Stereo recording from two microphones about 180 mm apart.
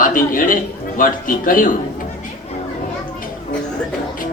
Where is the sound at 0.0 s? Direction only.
50° left (ahead or behind).